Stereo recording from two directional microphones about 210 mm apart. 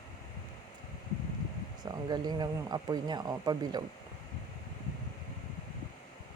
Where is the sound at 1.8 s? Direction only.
20° right (ahead or behind).